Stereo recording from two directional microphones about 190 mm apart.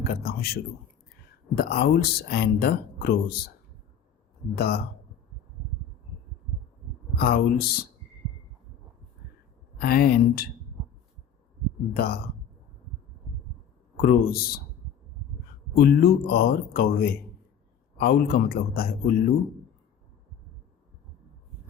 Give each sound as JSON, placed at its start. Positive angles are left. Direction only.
{"t": 0.0, "sound": "speech", "side_deg": 50}
{"t": 4.5, "sound": "speech", "side_deg": 55}
{"t": 7.2, "sound": "speech", "side_deg": 50}
{"t": 9.7, "sound": "speech", "side_deg": 55}
{"t": 11.9, "sound": "speech", "side_deg": 55}
{"t": 13.9, "sound": "speech", "side_deg": 50}
{"t": 15.7, "sound": "speech", "side_deg": 55}